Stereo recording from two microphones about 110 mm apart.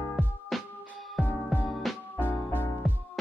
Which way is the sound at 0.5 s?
Centre (ahead or behind).